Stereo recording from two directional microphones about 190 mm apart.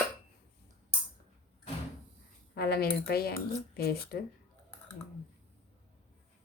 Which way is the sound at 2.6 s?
55° left (ahead or behind).